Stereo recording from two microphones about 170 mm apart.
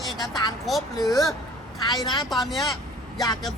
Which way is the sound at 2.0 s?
25° left (ahead or behind).